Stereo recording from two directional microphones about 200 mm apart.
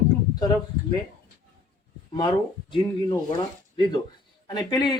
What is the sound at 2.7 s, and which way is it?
Speech, 20° left (ahead or behind).